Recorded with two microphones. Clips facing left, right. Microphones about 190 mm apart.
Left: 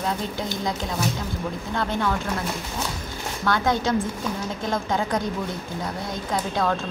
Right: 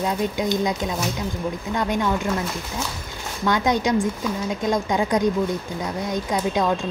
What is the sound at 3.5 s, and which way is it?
A woman's voice, 15° right (ahead or behind).